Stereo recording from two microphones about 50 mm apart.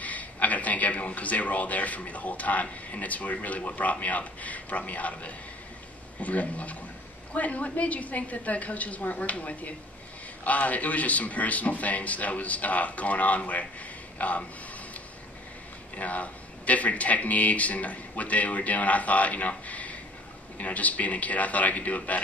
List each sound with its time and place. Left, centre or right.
0.0 s speech: left
16.0 s speech: left